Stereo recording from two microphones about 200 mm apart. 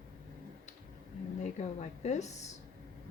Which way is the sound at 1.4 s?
35° left (ahead or behind).